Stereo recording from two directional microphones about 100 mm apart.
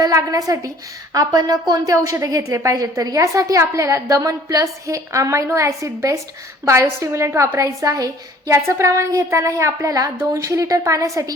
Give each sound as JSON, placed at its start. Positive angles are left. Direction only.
{"t": 0.0, "sound": "a woman's voice", "side_deg": -35}